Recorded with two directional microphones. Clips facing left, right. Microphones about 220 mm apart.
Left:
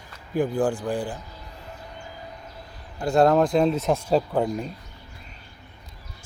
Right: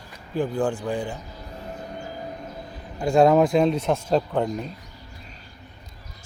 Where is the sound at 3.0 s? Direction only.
5° left (ahead or behind).